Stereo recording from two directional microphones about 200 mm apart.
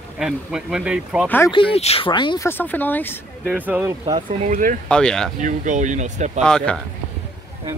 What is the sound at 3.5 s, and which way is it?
Speech, 10° right (ahead or behind).